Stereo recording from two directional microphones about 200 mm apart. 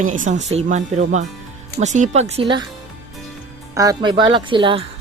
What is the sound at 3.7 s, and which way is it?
Speech, 20° right (ahead or behind).